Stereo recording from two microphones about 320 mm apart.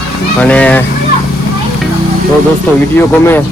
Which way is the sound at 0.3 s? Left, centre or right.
Centre.